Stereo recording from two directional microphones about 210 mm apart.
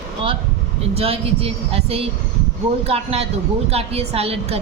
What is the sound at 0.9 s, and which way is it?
A woman's voice, 30° right (ahead or behind).